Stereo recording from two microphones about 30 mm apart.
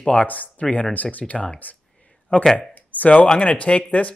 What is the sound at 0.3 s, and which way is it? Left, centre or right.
Speech, left.